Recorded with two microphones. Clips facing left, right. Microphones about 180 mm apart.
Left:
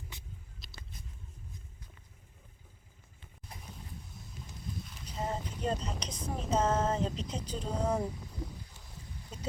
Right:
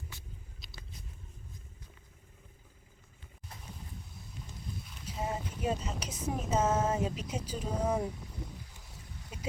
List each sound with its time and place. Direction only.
0.1 s vehicle: 20° left (ahead or behind)
0.6 s vehicle: centre (ahead or behind)
5.0 s speech: 10° right (ahead or behind)
8.7 s a sound: 10° right (ahead or behind)